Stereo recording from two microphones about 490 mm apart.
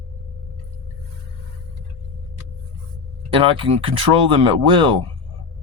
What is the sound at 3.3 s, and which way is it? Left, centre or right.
Speech, centre.